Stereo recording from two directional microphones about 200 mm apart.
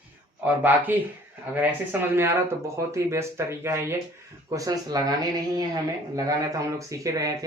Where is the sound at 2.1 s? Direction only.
10° right (ahead or behind).